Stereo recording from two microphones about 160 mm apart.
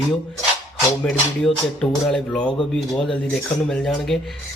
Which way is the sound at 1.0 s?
5° left (ahead or behind).